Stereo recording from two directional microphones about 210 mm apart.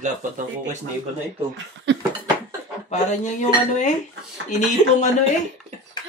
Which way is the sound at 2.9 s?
35° left (ahead or behind).